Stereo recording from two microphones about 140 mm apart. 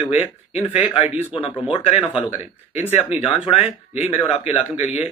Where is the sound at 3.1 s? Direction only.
45° left (ahead or behind).